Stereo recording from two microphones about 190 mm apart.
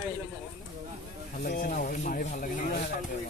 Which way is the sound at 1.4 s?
50° left (ahead or behind).